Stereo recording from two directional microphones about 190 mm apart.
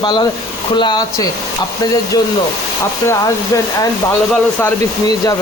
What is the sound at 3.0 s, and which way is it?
Speech, 15° left (ahead or behind).